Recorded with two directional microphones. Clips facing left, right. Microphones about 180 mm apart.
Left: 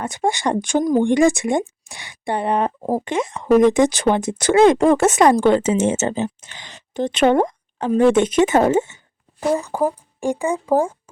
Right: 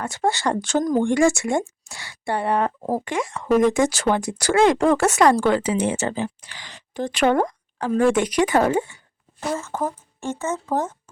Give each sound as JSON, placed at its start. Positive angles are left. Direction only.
{"t": 0.0, "sound": "speech", "side_deg": 15}